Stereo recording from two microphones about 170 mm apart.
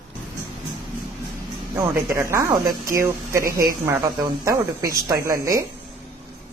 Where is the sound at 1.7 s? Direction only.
15° right (ahead or behind).